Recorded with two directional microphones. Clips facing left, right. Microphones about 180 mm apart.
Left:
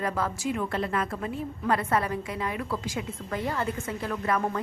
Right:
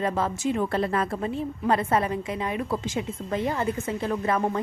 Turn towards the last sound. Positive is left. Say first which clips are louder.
# right 3 dB
turn(degrees=-25)  # may be behind; listen again after turning